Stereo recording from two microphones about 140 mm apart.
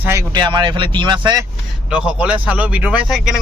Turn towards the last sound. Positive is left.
turn(degrees=-5)  # may be behind; listen again after turning